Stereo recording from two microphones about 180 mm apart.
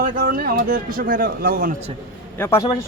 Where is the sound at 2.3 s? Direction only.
15° left (ahead or behind).